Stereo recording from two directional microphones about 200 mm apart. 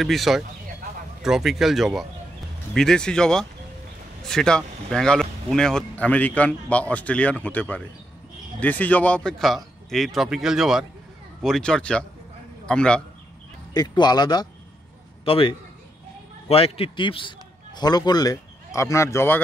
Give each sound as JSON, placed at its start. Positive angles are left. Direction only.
{"t": 0.0, "sound": "a man's voice", "side_deg": 0}
{"t": 13.7, "sound": "a man's voice", "side_deg": 20}